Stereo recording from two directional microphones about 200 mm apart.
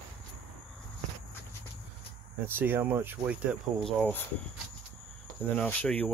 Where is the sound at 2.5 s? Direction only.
10° right (ahead or behind).